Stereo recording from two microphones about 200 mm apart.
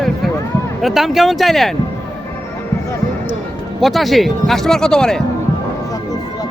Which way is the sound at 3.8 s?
Centre (ahead or behind).